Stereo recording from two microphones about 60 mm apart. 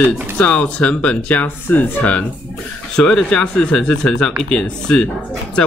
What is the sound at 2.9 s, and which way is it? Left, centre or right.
Speech, centre.